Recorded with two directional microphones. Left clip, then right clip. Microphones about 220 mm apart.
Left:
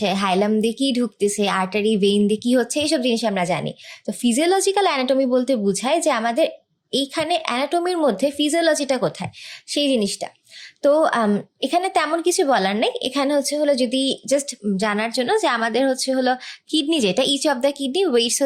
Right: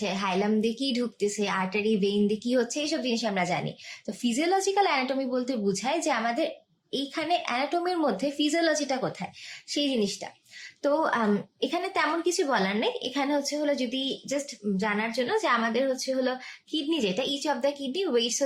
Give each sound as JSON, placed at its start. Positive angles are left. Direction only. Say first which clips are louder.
{"t": 0.0, "sound": "a woman's voice", "louder": "left 8 dB", "side_deg": 40}